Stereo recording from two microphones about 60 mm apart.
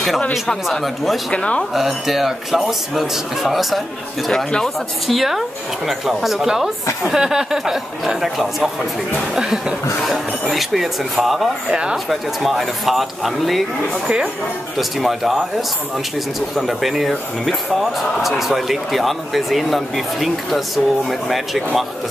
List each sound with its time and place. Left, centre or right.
0.7 s speech: centre
1.3 s speech: centre
1.7 s speech: centre
4.3 s speech: centre
5.0 s speech: centre
9.9 s a sound: centre
10.5 s speech: centre
11.7 s speech: centre
12.1 s speech: centre
14.8 s speech: centre